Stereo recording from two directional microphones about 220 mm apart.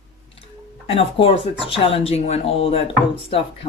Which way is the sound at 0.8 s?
25° left (ahead or behind).